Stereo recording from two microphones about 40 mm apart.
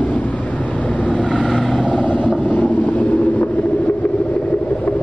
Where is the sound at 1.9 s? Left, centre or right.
Left.